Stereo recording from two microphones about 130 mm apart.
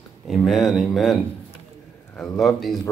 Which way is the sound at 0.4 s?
Centre (ahead or behind).